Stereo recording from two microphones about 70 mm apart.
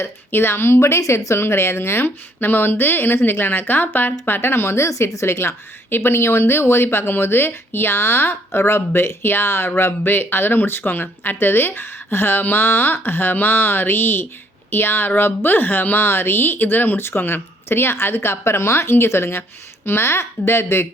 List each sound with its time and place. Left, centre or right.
0.0 s speech: left